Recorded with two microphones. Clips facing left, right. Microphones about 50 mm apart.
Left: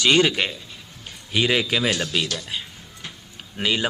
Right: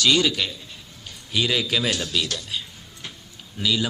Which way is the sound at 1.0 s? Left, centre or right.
Left.